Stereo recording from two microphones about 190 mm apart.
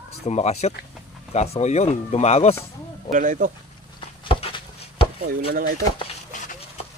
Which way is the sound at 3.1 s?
45° right (ahead or behind).